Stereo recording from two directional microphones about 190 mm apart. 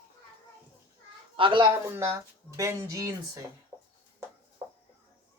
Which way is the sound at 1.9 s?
15° right (ahead or behind).